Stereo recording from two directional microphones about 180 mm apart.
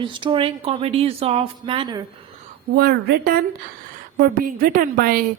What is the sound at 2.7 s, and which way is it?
A woman's voice, 55° right (ahead or behind).